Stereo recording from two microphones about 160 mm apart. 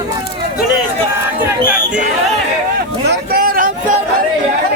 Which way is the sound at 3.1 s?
70° right (ahead or behind).